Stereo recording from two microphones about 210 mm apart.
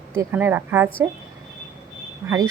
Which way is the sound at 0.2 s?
10° right (ahead or behind).